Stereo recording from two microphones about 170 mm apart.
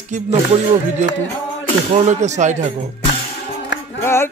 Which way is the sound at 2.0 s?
45° right (ahead or behind).